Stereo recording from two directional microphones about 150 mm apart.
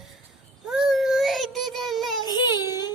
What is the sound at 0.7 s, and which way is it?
Child singing, 5° right (ahead or behind).